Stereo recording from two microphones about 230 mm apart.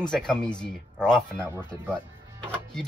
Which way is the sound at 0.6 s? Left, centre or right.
Centre.